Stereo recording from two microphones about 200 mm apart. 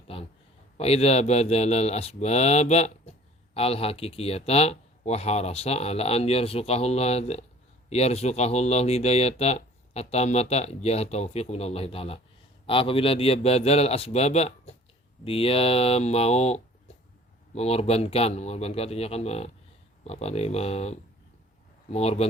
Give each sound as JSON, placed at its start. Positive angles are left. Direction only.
{"t": 0.8, "sound": "a man's voice", "side_deg": 30}